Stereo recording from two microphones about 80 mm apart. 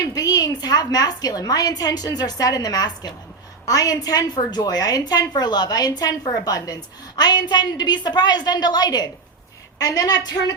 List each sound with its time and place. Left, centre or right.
0.0 s a woman's voice: left
7.2 s a woman's voice: left